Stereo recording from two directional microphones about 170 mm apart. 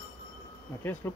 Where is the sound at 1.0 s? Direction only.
15° left (ahead or behind).